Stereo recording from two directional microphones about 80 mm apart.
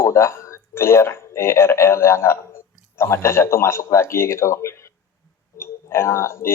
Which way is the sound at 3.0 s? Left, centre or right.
Left.